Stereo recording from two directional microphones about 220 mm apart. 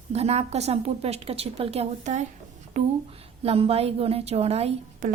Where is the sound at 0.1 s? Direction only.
30° right (ahead or behind).